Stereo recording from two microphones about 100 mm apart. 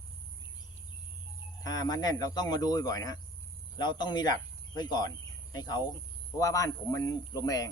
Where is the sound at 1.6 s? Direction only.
40° left (ahead or behind).